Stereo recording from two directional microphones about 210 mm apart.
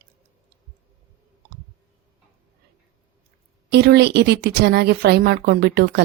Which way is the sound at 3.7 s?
50° right (ahead or behind).